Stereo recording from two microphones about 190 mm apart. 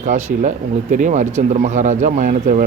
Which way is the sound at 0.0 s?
40° right (ahead or behind).